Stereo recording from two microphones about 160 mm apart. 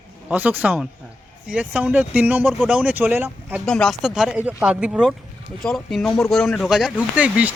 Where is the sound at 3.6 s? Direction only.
5° left (ahead or behind).